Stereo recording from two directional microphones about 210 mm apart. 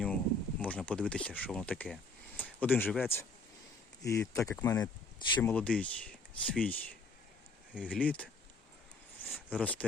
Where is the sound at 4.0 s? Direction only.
15° left (ahead or behind).